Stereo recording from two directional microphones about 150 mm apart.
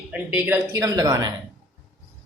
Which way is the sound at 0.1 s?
10° right (ahead or behind).